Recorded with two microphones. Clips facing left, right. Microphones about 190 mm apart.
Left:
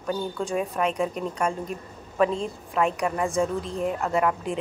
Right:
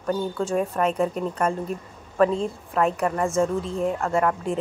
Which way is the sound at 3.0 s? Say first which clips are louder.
Right 2 dB; 15° left (ahead or behind).